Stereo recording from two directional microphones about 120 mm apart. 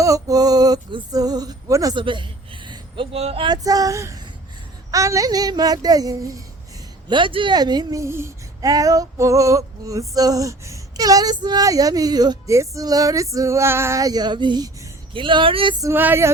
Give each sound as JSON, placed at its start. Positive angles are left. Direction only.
{"t": 0.0, "sound": "male singing", "side_deg": -30}
{"t": 2.0, "sound": "a man's voice", "side_deg": -45}
{"t": 3.4, "sound": "speech", "side_deg": -35}
{"t": 7.1, "sound": "speech", "side_deg": -45}
{"t": 15.8, "sound": "speech", "side_deg": -20}